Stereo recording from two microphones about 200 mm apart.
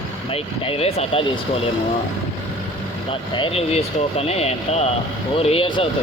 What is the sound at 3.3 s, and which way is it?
Speech, 25° left (ahead or behind).